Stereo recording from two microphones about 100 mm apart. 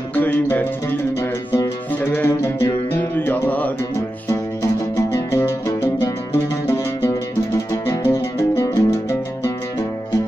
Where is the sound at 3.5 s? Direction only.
15° left (ahead or behind).